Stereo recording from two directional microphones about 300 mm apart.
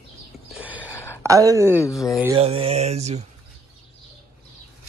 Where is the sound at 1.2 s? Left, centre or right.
Centre.